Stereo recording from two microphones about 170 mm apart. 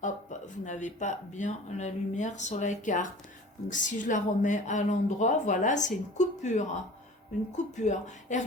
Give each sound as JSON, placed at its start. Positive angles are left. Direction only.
{"t": 0.0, "sound": "speech", "side_deg": 45}